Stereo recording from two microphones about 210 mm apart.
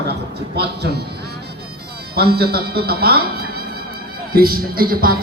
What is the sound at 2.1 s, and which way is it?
A man's voice, 50° right (ahead or behind).